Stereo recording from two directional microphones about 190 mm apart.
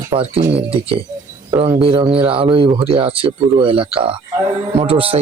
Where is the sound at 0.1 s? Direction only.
30° right (ahead or behind).